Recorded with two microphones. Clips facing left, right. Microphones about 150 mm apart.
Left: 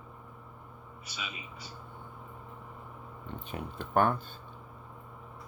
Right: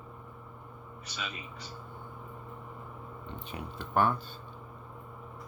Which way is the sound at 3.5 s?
50° left (ahead or behind).